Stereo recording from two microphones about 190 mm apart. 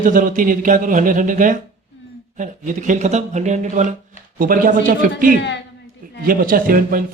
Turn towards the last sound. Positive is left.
turn(degrees=-50)  # may be behind; listen again after turning